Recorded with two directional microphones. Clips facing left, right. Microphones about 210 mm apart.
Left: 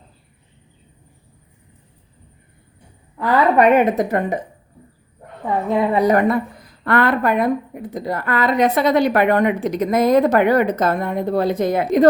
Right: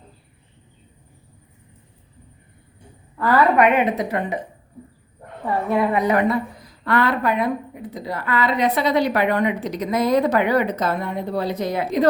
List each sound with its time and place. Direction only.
3.6 s a woman's voice: 40° left (ahead or behind)
5.5 s a woman's voice: 20° left (ahead or behind)
6.0 s a woman's voice: 40° left (ahead or behind)